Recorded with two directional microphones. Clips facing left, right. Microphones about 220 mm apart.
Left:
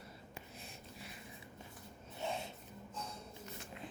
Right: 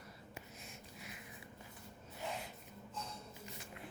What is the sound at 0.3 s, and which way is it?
Wheeze, 30° left (ahead or behind).